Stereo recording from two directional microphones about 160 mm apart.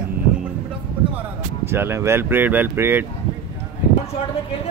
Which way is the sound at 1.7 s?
15° right (ahead or behind).